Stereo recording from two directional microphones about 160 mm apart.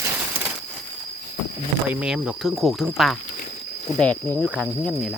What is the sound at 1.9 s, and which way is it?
Speech, 5° right (ahead or behind).